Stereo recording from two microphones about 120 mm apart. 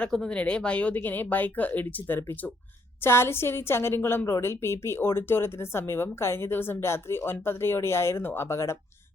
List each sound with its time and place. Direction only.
0.0 s a woman's voice: 10° left (ahead or behind)